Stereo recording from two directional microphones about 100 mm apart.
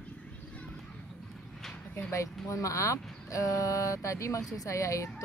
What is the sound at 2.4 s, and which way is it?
Speech, 30° left (ahead or behind).